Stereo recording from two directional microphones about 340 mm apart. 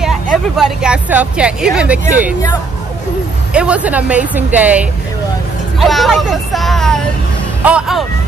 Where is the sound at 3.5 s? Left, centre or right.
Centre.